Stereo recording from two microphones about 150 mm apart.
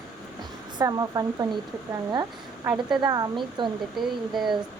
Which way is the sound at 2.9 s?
25° right (ahead or behind).